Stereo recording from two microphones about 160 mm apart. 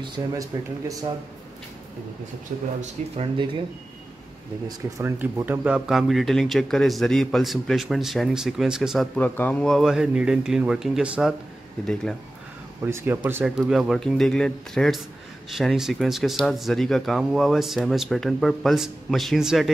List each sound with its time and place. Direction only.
0.0 s speech: 25° right (ahead or behind)
2.5 s speech: 55° right (ahead or behind)
4.6 s speech: 20° right (ahead or behind); by 9.2 s centre (ahead or behind)
9.2 s speech: 10° left (ahead or behind)
12.8 s speech: 15° right (ahead or behind)